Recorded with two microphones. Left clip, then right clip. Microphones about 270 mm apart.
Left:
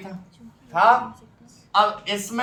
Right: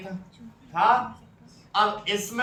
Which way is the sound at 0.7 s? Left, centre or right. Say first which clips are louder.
Left 5 dB; left.